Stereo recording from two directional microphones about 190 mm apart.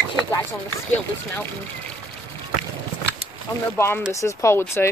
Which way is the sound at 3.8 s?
10° left (ahead or behind).